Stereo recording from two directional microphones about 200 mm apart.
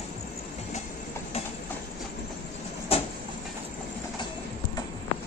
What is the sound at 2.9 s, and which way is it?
Vehicle, 30° left (ahead or behind).